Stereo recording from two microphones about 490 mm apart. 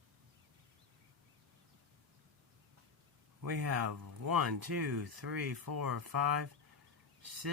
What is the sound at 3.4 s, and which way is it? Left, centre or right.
Speech, right.